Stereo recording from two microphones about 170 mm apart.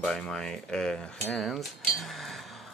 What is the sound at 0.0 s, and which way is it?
Speech, 5° left (ahead or behind).